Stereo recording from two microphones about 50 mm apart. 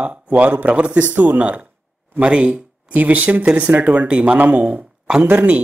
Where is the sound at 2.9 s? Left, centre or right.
Right.